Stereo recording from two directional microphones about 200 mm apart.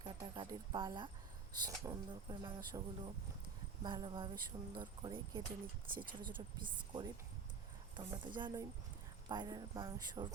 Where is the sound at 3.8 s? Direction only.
25° right (ahead or behind).